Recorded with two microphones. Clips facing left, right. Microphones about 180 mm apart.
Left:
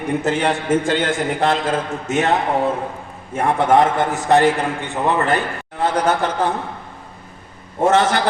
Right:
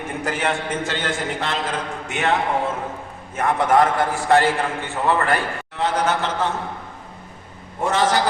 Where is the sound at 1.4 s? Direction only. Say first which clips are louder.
Left 7 dB; 50° left (ahead or behind).